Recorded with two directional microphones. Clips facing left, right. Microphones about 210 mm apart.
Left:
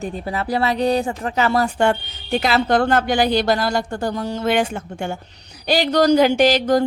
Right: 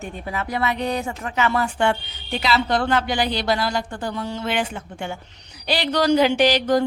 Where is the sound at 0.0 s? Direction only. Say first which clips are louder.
Left 4 dB; 35° left (ahead or behind).